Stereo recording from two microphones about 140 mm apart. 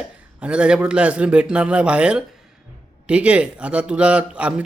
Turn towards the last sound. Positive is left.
turn(degrees=-10)  # may be behind; listen again after turning